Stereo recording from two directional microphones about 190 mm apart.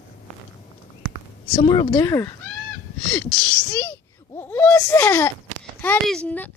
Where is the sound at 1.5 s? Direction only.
20° left (ahead or behind).